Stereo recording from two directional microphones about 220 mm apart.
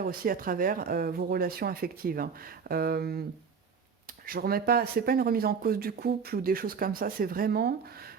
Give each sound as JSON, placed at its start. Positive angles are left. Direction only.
{"t": 0.0, "sound": "speech", "side_deg": -40}